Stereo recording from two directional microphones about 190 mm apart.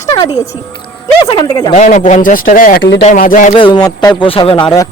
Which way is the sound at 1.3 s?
25° left (ahead or behind).